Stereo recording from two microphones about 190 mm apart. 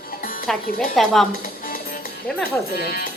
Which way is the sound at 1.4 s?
50° left (ahead or behind).